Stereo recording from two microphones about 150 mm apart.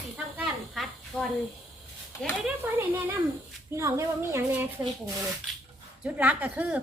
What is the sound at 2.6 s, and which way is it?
A woman's voice, 15° right (ahead or behind).